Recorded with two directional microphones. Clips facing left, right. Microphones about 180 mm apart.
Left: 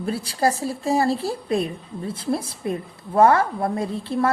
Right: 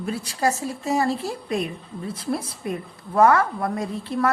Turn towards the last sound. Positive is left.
turn(degrees=30)  # may be behind; listen again after turning